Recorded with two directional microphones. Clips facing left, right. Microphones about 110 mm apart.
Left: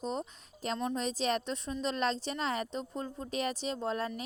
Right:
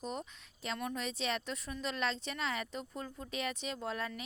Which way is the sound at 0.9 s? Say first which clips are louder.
Left 5 dB; 35° left (ahead or behind).